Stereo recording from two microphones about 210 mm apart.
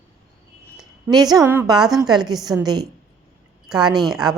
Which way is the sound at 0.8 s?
20° right (ahead or behind).